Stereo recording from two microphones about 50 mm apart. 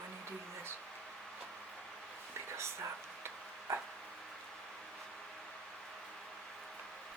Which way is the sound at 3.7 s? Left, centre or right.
Right.